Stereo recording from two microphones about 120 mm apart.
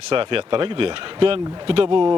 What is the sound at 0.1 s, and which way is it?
Speech, 50° right (ahead or behind).